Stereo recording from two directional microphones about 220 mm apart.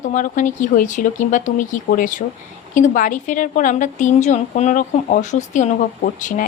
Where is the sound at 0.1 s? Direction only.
35° left (ahead or behind).